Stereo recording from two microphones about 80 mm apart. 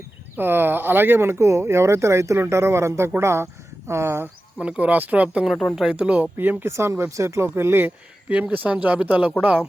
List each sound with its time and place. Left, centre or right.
0.3 s speech: right
4.6 s speech: right